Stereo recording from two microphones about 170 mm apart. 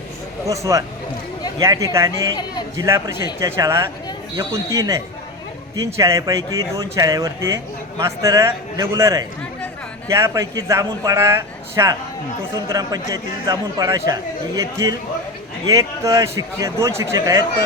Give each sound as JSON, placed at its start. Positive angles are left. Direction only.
{"t": 0.4, "sound": "a man's voice", "side_deg": -20}
{"t": 2.3, "sound": "a man's voice", "side_deg": 25}
{"t": 2.7, "sound": "a man's voice", "side_deg": -15}